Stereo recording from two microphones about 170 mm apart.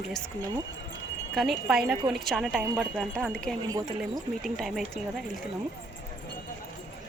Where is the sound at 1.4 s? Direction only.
Centre (ahead or behind).